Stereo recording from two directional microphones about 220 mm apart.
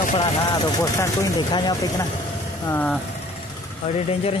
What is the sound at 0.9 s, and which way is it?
Speech, 15° left (ahead or behind).